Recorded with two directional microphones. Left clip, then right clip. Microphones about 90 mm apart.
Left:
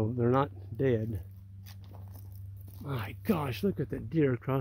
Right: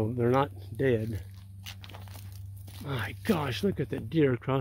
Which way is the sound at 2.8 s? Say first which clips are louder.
Right 3 dB; 10° left (ahead or behind).